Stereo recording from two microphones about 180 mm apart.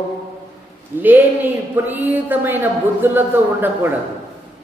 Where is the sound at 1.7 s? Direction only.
10° right (ahead or behind).